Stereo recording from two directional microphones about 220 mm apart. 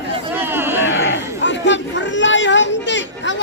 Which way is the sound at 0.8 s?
60° left (ahead or behind).